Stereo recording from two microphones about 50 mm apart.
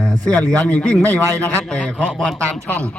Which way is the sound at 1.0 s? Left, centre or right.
Left.